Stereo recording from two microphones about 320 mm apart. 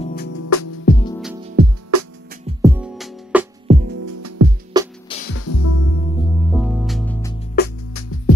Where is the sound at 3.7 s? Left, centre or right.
Right.